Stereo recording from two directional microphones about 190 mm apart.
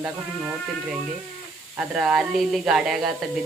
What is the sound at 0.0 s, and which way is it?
Speech, 5° right (ahead or behind).